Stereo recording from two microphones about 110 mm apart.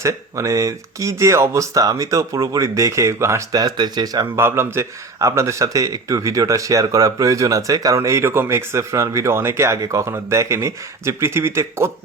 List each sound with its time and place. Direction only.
0.0 s speech: 30° right (ahead or behind)
4.4 s speech: 20° right (ahead or behind)